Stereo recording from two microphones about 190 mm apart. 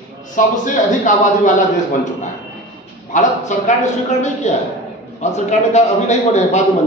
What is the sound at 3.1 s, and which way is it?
A man's voice, 40° left (ahead or behind).